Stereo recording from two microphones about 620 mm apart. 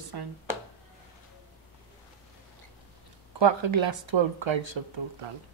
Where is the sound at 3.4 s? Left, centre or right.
Right.